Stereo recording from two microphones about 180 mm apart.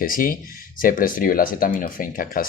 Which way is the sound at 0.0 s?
50° left (ahead or behind).